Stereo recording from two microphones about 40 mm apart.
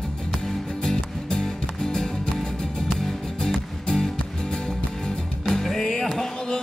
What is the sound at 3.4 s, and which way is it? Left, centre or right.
Music, centre.